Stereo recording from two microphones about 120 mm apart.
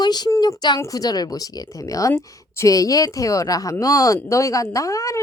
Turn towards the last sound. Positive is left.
turn(degrees=25)  # may be behind; listen again after turning